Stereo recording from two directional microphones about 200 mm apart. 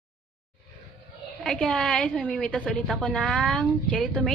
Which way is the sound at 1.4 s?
5° left (ahead or behind).